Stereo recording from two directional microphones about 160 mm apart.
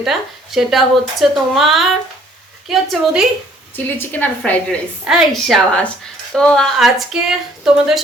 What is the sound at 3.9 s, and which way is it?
Speech, 10° left (ahead or behind).